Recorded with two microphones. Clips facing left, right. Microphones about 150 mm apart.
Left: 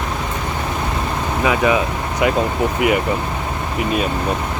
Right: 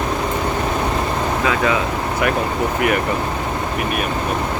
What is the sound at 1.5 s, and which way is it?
Speech, 15° left (ahead or behind).